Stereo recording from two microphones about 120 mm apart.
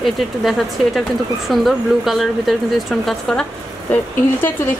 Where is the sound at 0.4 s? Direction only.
Centre (ahead or behind).